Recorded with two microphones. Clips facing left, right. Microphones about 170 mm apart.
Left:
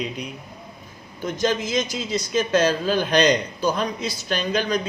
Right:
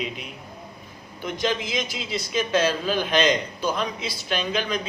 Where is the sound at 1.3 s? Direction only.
45° left (ahead or behind).